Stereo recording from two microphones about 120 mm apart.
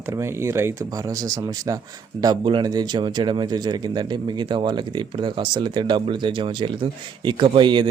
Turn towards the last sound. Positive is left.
turn(degrees=-40)  # may be behind; listen again after turning